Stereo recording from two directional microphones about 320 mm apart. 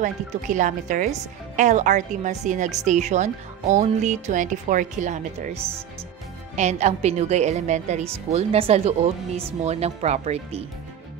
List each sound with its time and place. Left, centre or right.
0.0 s speech: right